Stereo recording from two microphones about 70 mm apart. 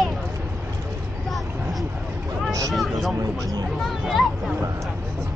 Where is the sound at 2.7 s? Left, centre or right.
Centre.